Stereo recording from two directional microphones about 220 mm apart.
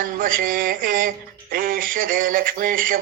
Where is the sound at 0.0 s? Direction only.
40° right (ahead or behind).